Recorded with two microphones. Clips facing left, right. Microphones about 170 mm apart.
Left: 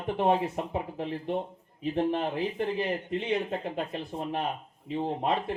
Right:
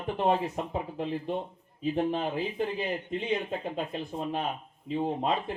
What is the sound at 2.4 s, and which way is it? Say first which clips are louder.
Speech: left 1 dB; 70° left (ahead or behind).